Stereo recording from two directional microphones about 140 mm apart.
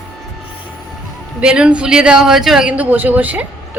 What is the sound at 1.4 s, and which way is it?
A woman's voice, 10° right (ahead or behind).